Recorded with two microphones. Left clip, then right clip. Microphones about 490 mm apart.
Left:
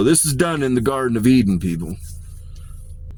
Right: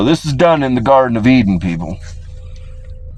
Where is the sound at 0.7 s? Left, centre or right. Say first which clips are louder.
Right 9 dB; centre.